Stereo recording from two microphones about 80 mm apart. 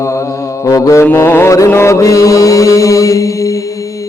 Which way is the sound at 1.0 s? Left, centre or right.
Left.